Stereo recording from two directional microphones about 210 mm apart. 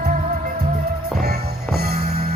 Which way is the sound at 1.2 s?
45° right (ahead or behind).